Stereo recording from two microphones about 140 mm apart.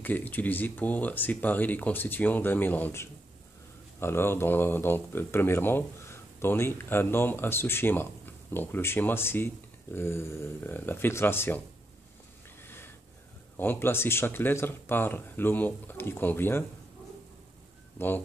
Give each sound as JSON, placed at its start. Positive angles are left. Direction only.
{"t": 0.0, "sound": "speech", "side_deg": 10}
{"t": 12.6, "sound": "a sound", "side_deg": 15}
{"t": 13.6, "sound": "speech", "side_deg": 15}
{"t": 17.9, "sound": "speech", "side_deg": 15}